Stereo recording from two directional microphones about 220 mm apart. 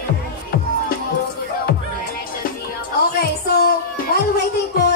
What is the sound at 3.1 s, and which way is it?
Music, 45° left (ahead or behind).